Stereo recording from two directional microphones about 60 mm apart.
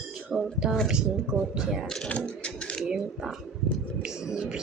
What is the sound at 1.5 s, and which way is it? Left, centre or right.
Speech, centre.